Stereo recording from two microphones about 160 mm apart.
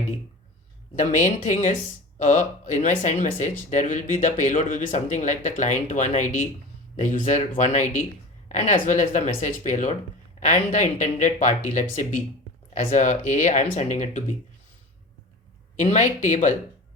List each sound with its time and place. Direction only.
0.9 s speech: 50° left (ahead or behind)
15.7 s speech: 45° left (ahead or behind)